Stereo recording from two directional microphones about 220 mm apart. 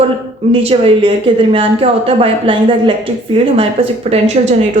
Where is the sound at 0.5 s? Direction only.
25° right (ahead or behind).